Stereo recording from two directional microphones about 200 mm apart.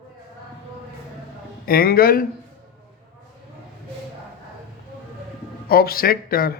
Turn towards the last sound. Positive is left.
turn(degrees=45)  # may be behind; listen again after turning